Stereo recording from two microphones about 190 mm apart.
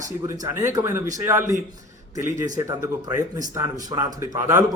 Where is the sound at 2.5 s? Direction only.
20° right (ahead or behind).